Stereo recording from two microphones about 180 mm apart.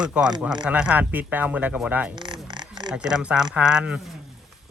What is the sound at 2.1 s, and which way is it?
Zipper, 25° right (ahead or behind).